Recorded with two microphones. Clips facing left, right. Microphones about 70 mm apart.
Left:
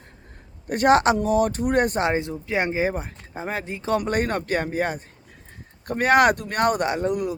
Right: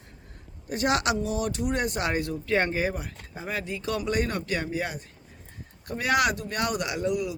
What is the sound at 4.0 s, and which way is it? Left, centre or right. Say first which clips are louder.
Speech: left 4 dB; left.